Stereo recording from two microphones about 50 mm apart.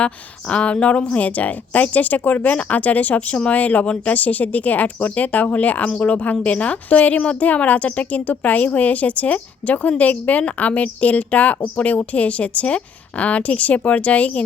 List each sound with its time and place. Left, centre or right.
0.0 s a woman's voice: left